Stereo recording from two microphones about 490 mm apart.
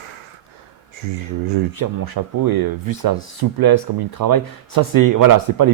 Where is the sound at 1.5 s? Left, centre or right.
Right.